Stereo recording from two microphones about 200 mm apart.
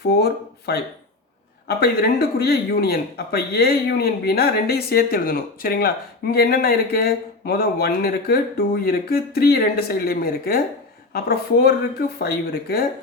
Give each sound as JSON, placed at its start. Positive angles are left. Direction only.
{"t": 0.0, "sound": "speech", "side_deg": 50}